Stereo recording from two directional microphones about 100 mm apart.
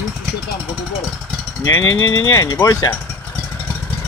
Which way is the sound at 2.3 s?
30° left (ahead or behind).